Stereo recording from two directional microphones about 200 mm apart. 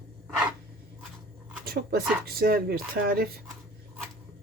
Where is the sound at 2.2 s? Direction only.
50° right (ahead or behind).